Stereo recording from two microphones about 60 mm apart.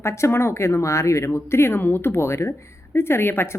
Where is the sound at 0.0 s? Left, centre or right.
Left.